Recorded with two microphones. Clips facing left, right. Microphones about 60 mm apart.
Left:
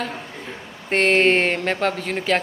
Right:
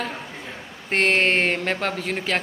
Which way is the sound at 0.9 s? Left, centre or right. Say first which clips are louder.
Left 3 dB; centre.